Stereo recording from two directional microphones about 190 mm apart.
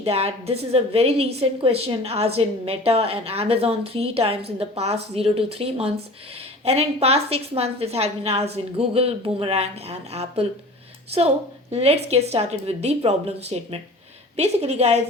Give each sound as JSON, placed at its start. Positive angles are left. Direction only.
{"t": 0.0, "sound": "a woman's voice", "side_deg": -30}